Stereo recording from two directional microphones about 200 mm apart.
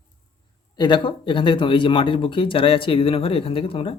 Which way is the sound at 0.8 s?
20° left (ahead or behind).